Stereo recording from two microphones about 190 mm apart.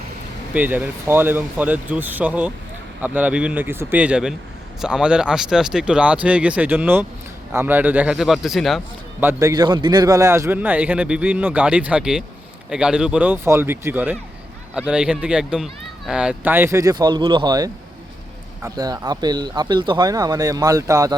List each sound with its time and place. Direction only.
0.5 s a man's voice: 10° right (ahead or behind)
9.2 s a man's voice: 20° right (ahead or behind)